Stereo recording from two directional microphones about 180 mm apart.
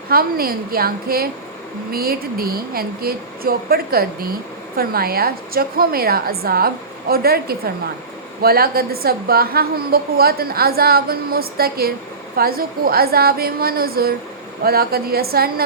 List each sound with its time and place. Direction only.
0.1 s a woman's voice: 55° right (ahead or behind)